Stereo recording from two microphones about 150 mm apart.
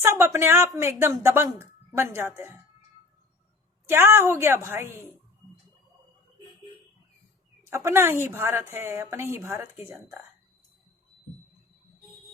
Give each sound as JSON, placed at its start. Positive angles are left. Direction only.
{"t": 0.0, "sound": "speech", "side_deg": -15}
{"t": 3.8, "sound": "speech", "side_deg": -15}
{"t": 7.6, "sound": "speech", "side_deg": -15}